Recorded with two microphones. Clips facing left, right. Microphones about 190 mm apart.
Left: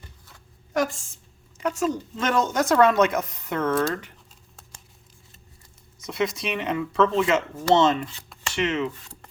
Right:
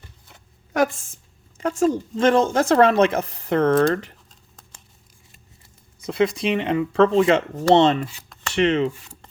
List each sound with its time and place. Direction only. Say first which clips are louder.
0.7 s a sound: right 4 dB; 60° right (ahead or behind)
1.5 s speech: right 5 dB; 30° right (ahead or behind)
6.0 s speech: right 6 dB; 30° right (ahead or behind)